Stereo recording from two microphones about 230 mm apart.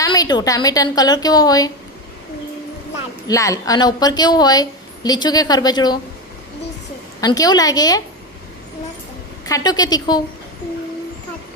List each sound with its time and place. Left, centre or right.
0.0 s a woman's voice: centre
3.2 s a woman's voice: centre
7.2 s a woman's voice: centre
9.5 s a woman's voice: centre